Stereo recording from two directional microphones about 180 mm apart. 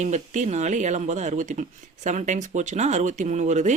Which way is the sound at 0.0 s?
40° right (ahead or behind).